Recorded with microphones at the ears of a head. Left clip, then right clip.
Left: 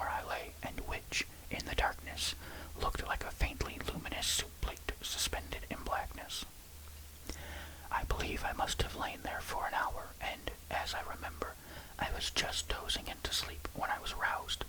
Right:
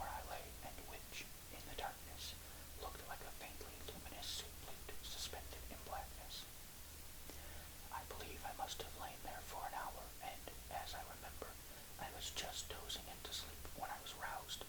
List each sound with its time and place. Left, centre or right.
0.0 s whispering: left